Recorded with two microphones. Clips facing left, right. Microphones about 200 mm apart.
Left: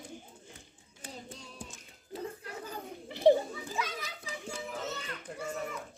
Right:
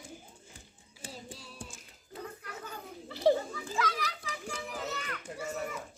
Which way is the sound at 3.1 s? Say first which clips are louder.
Left 3 dB; 20° left (ahead or behind).